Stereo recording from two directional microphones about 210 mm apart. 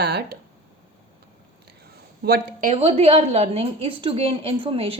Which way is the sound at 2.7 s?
30° right (ahead or behind).